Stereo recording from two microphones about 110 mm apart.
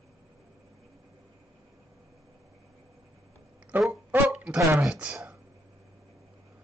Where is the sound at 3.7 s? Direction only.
15° right (ahead or behind).